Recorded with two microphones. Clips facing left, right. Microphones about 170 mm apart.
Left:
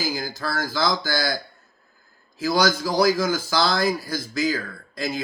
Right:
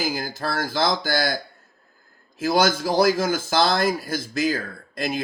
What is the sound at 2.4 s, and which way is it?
Speech, 55° right (ahead or behind).